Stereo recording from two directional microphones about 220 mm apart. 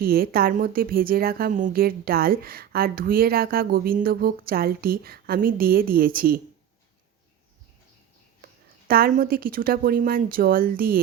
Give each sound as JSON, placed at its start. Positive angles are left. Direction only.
{"t": 0.0, "sound": "a woman's voice", "side_deg": -40}
{"t": 8.9, "sound": "a woman's voice", "side_deg": -40}